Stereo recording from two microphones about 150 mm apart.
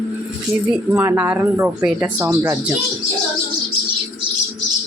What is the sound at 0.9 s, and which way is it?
Speech, 15° right (ahead or behind).